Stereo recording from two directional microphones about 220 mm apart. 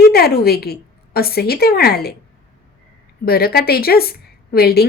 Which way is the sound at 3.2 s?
45° left (ahead or behind).